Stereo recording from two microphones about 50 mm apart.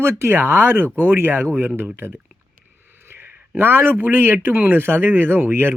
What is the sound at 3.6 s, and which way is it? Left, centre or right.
Speech, right.